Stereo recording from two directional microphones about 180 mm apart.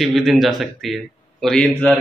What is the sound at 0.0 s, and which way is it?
A man's voice, centre (ahead or behind).